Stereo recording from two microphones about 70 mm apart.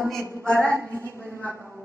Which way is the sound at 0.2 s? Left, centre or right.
Right.